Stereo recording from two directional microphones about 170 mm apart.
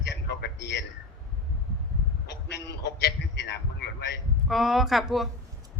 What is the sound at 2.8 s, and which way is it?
A man's voice, 80° left.